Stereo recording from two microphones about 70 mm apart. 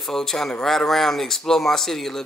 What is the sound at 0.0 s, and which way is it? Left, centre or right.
A man's voice, centre.